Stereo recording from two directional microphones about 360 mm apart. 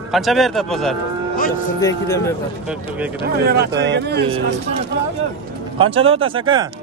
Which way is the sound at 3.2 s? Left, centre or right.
Right.